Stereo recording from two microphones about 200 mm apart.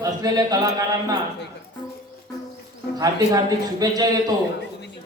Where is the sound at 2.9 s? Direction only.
20° right (ahead or behind).